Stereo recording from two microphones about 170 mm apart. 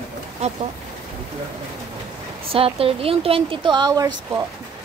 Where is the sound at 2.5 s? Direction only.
35° right (ahead or behind).